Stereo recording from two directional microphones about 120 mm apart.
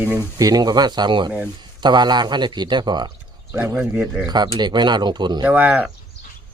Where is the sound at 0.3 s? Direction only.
30° right (ahead or behind).